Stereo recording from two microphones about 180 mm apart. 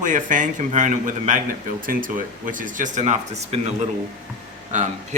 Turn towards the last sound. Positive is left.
turn(degrees=-40)  # may be behind; listen again after turning